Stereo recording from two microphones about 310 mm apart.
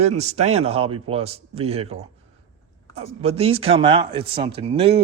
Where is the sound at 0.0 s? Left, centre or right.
Right.